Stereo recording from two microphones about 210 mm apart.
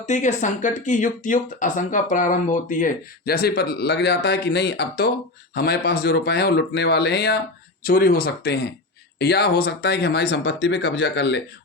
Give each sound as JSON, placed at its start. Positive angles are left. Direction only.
{"t": 0.0, "sound": "speech", "side_deg": 35}